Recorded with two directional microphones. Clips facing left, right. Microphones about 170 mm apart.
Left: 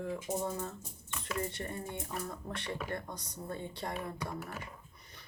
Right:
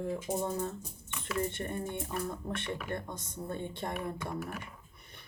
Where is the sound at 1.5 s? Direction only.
20° right (ahead or behind).